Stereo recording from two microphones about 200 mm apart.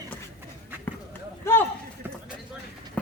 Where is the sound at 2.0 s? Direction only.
10° right (ahead or behind).